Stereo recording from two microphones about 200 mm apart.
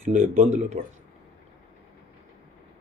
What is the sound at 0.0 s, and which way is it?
Speech, 40° right (ahead or behind).